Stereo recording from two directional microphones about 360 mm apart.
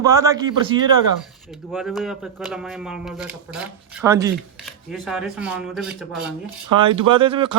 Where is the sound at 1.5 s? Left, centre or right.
Centre.